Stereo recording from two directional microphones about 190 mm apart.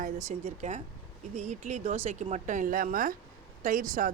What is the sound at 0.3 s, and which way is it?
A woman's voice, 40° right (ahead or behind).